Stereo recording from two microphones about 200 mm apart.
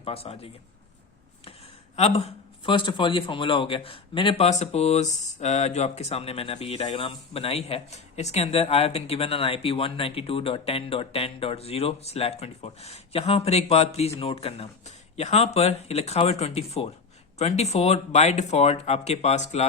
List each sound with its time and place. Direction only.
0.0 s a man's voice: 30° left (ahead or behind)
2.0 s a man's voice: 30° left (ahead or behind)